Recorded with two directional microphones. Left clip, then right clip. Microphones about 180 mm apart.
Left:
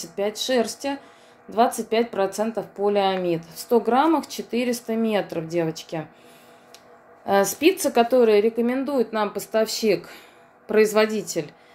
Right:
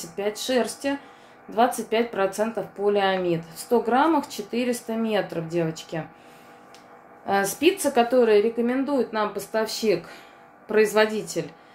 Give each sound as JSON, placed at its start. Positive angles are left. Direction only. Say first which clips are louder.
{"t": 0.0, "sound": "speech", "louder": "left 2 dB", "side_deg": 40}
{"t": 7.2, "sound": "speech", "louder": "left 2 dB", "side_deg": 40}